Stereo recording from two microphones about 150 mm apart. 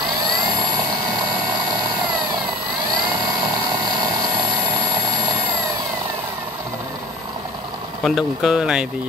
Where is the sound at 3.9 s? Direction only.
30° right (ahead or behind).